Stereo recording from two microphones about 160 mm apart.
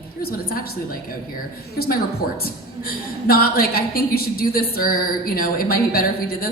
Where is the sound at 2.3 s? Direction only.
70° left (ahead or behind).